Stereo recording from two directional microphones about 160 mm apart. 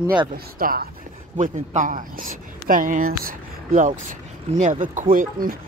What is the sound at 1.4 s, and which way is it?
Speech, 55° right (ahead or behind).